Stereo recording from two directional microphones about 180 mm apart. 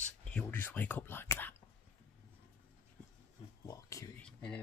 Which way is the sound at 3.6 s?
20° left (ahead or behind).